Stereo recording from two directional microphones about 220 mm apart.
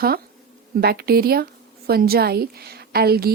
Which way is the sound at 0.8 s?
45° right (ahead or behind).